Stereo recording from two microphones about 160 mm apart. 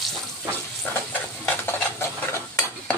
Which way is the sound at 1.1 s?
10° left (ahead or behind).